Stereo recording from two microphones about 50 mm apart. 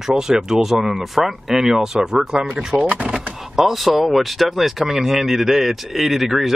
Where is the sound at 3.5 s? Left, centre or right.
Centre.